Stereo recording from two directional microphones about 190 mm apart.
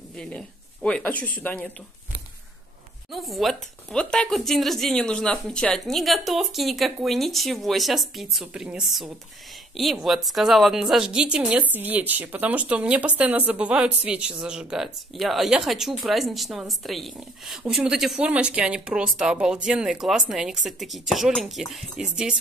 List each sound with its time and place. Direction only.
0.1 s a woman's voice: 5° left (ahead or behind)
3.1 s speech: centre (ahead or behind)